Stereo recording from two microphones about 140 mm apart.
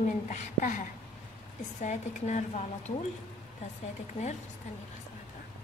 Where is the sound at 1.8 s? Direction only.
60° left (ahead or behind).